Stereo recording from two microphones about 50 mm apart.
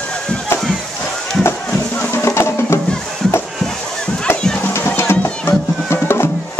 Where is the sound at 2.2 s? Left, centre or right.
Left.